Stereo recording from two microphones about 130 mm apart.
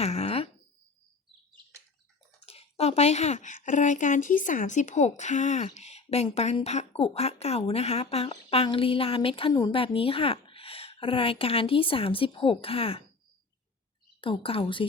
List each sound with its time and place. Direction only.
0.0 s wail: 55° left (ahead or behind)
2.4 s speech: 50° left (ahead or behind)
9.5 s speech: 30° left (ahead or behind)
9.7 s speech: 45° left (ahead or behind)
14.2 s speech: 45° left (ahead or behind)